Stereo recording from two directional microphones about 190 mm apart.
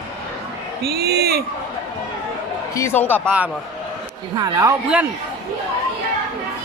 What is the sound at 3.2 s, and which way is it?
Speech, 10° right (ahead or behind).